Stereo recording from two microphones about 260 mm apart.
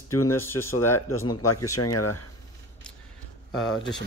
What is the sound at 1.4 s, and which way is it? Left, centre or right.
Speech, left.